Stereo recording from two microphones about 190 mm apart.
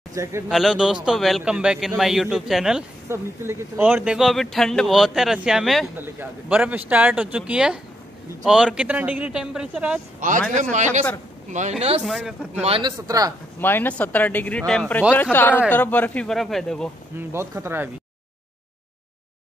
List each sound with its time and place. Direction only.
0.1 s speech: 15° right (ahead or behind)
0.5 s speech: centre (ahead or behind)
3.1 s speech: 15° right (ahead or behind)
10.5 s speech: 40° right (ahead or behind)
12.0 s speech: centre (ahead or behind)
12.6 s a man's voice: 25° right (ahead or behind)
13.6 s speech: 10° left (ahead or behind)
17.3 s speech: 15° right (ahead or behind)